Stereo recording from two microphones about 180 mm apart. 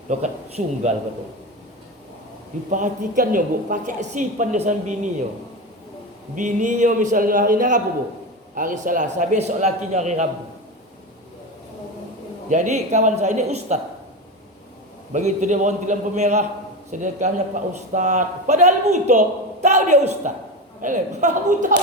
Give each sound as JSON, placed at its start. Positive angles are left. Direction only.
{"t": 0.1, "sound": "a man's voice", "side_deg": -40}
{"t": 2.6, "sound": "a woman's voice", "side_deg": -45}
{"t": 6.3, "sound": "a woman's voice", "side_deg": -40}
{"t": 12.5, "sound": "a man's voice", "side_deg": -40}
{"t": 15.1, "sound": "a man's voice", "side_deg": -40}